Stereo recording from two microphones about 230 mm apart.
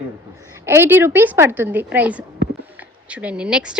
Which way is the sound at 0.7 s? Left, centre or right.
Centre.